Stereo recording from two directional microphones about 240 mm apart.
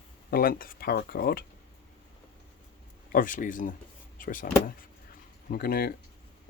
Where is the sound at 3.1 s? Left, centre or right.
Left.